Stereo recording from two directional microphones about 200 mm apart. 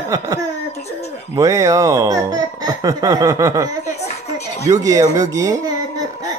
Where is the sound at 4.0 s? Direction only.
35° left (ahead or behind).